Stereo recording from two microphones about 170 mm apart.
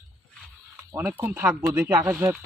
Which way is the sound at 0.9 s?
15° right (ahead or behind).